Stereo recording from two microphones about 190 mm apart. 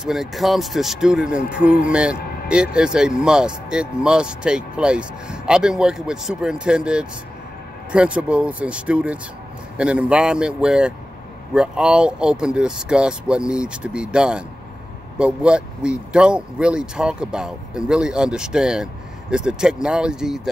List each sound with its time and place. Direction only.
0.0 s speech: centre (ahead or behind)